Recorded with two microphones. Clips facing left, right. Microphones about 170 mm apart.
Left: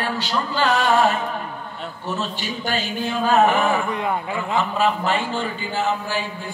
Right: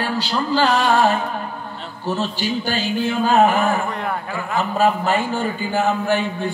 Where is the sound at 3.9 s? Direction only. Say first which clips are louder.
Left 1 dB; 20° left (ahead or behind).